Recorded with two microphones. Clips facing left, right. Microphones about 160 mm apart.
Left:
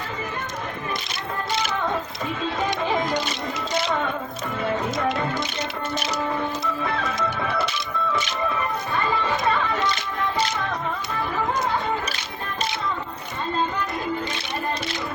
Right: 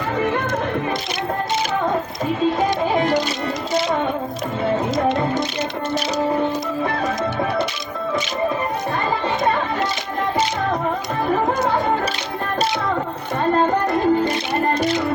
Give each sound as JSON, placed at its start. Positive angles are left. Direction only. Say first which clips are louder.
{"t": 0.2, "sound": "music", "louder": "right 14 dB", "side_deg": -70}
{"t": 11.3, "sound": "music", "louder": "right 6 dB", "side_deg": -50}
{"t": 13.4, "sound": "music", "louder": "right 8 dB", "side_deg": -55}